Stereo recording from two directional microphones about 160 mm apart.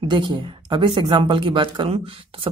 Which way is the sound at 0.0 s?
30° right (ahead or behind).